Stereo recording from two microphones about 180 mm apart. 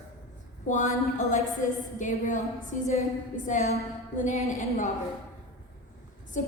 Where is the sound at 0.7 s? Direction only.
45° left (ahead or behind).